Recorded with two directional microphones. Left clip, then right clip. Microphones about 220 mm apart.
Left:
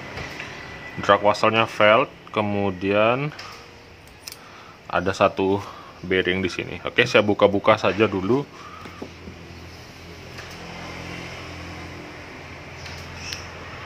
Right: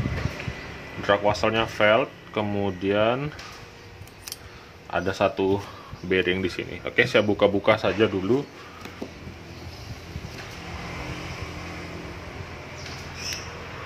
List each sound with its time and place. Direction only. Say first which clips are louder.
1.0 s speech: left 4 dB; 15° left (ahead or behind)
4.9 s speech: left 4 dB; 15° left (ahead or behind)